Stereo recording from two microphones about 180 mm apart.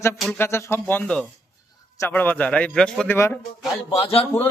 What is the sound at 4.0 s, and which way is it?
Speech, 35° left (ahead or behind).